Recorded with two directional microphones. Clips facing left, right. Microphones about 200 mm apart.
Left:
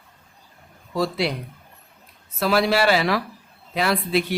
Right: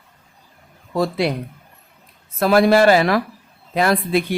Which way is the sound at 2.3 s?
50° right (ahead or behind).